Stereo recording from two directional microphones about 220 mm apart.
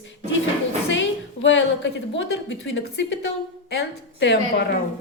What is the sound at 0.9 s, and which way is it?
A woman's voice, 55° left (ahead or behind).